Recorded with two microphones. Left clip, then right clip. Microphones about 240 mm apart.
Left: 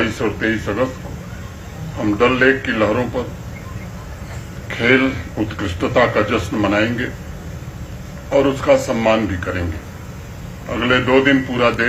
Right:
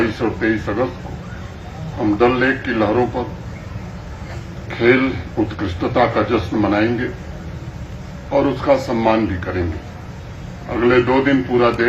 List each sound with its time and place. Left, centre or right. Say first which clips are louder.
0.0 s a man's voice: even; left
2.0 s a man's voice: even; left
4.7 s a man's voice: even; left
8.3 s a man's voice: left 2 dB; left
10.7 s a man's voice: right 1 dB; left